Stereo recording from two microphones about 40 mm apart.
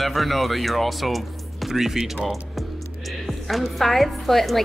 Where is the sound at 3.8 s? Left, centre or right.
Centre.